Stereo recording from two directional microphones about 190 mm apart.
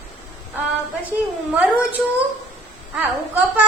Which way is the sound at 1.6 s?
10° right (ahead or behind).